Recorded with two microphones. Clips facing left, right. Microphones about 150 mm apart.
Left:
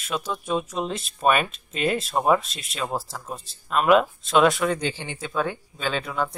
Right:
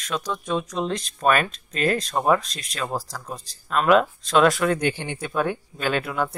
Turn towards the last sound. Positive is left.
turn(degrees=-10)  # may be behind; listen again after turning